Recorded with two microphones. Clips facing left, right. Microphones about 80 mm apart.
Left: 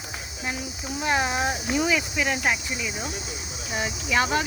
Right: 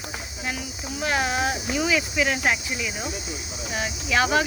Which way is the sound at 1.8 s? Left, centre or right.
Centre.